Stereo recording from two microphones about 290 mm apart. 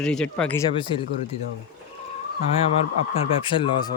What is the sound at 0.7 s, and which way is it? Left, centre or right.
Speech, centre.